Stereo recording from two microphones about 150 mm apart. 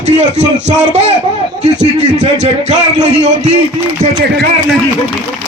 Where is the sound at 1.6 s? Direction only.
50° right (ahead or behind).